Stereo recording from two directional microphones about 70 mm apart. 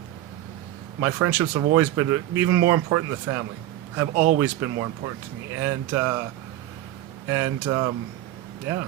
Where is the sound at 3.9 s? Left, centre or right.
Right.